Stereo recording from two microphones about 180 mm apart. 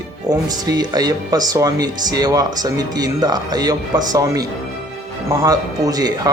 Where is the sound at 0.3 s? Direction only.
20° right (ahead or behind).